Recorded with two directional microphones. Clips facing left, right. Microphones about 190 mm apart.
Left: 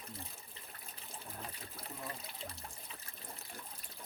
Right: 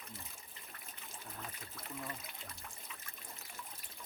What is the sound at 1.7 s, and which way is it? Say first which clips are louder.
Trickle: right 2 dB; 30° left (ahead or behind).